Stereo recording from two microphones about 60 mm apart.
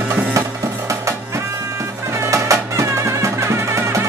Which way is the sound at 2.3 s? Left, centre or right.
Right.